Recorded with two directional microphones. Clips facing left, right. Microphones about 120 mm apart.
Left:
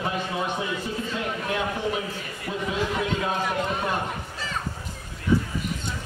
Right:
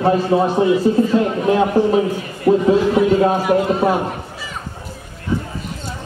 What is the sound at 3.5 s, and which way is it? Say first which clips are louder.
Speech: right 11 dB; 70° right (ahead or behind).